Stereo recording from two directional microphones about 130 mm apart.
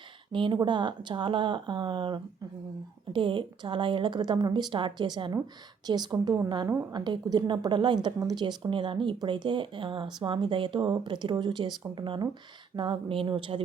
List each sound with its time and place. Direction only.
0.3 s a woman's voice: 40° right (ahead or behind)